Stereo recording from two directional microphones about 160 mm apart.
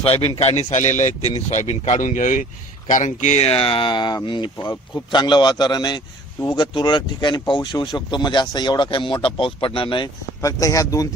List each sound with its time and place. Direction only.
0.0 s speech: 35° left (ahead or behind)
10.4 s speech: 20° left (ahead or behind)